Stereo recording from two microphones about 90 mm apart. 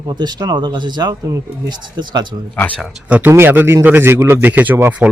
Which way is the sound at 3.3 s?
25° right (ahead or behind).